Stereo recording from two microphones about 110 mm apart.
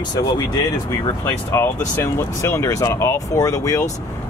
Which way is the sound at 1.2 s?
25° left (ahead or behind).